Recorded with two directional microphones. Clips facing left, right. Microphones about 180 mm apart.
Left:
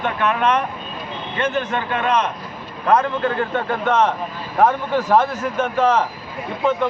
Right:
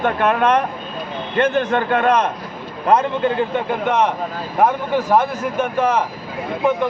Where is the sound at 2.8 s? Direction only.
20° right (ahead or behind).